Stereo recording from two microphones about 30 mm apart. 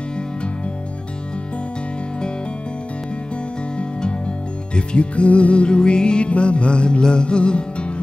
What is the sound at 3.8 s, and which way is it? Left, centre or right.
Music, left.